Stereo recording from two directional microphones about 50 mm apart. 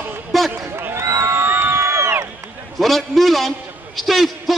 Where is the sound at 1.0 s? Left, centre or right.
Right.